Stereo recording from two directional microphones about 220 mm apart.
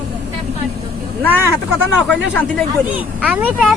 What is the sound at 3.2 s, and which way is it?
Speech, 5° right (ahead or behind).